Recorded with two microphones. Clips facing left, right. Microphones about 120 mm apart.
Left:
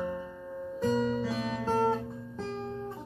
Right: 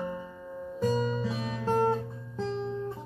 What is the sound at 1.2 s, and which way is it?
Music, centre (ahead or behind).